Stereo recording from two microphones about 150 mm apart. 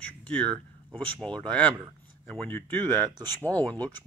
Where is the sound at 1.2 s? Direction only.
5° left (ahead or behind).